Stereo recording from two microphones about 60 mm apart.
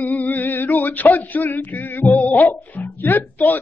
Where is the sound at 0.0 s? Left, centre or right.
Left.